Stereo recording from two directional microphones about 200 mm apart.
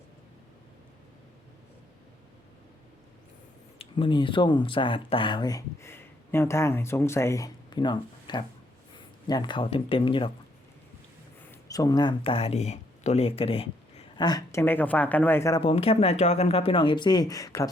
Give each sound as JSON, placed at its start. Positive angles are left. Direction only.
{"t": 3.8, "sound": "speech", "side_deg": 25}
{"t": 11.7, "sound": "speech", "side_deg": 20}
{"t": 15.6, "sound": "speech", "side_deg": 30}